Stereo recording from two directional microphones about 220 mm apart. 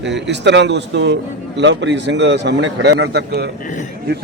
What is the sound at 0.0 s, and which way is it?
A man's voice, 50° right (ahead or behind).